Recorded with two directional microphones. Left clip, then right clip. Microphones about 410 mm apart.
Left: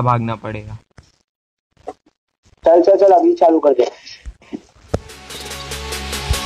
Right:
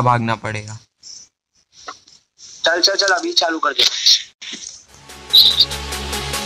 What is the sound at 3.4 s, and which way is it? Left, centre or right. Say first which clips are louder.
Speech: left 5 dB; right.